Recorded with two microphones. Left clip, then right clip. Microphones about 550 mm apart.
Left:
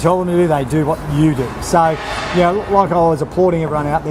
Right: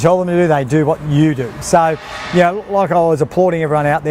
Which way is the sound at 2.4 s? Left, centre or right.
Right.